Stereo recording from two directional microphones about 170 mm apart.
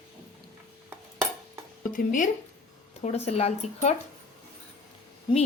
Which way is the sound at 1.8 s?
50° left (ahead or behind).